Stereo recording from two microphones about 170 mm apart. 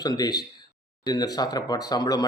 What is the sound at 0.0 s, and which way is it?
Speech, 25° left (ahead or behind).